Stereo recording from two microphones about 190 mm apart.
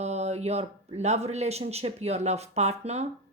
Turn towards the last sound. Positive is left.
turn(degrees=-35)  # may be behind; listen again after turning